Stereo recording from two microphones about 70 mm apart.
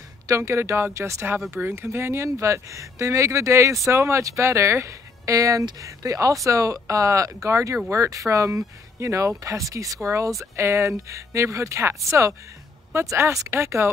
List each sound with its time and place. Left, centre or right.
0.3 s speech: right